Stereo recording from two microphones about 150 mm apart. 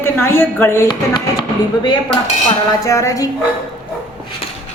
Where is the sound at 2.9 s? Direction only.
20° left (ahead or behind).